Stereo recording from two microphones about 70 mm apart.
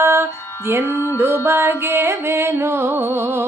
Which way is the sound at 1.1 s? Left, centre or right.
Right.